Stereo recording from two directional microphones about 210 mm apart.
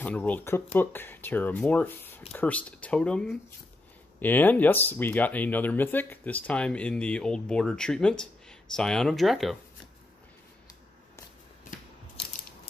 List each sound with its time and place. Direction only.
0.0 s speech: 5° left (ahead or behind)